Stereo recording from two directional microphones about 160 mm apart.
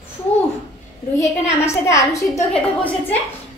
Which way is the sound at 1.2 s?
15° left (ahead or behind).